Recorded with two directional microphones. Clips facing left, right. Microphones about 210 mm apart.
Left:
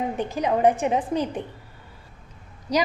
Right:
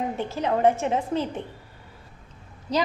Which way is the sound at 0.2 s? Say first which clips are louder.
Left 1 dB; 15° left (ahead or behind).